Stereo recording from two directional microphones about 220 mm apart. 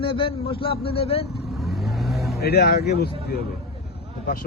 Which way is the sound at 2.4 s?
45° left (ahead or behind).